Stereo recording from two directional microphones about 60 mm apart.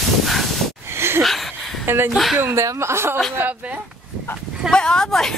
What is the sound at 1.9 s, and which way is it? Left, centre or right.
Speech, right.